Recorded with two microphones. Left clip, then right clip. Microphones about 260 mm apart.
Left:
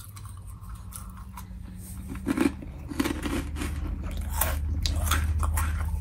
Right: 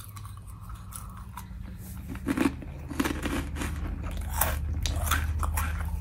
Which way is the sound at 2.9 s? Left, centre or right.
Centre.